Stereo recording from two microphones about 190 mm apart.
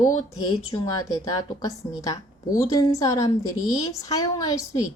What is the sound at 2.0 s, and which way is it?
A woman's voice, 15° left (ahead or behind).